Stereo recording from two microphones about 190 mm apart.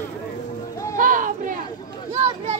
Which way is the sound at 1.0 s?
45° right (ahead or behind).